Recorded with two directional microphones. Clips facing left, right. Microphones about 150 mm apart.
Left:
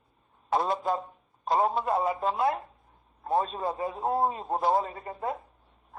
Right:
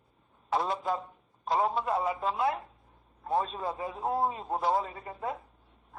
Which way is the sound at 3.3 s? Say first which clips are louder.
Left 3 dB; 40° left (ahead or behind).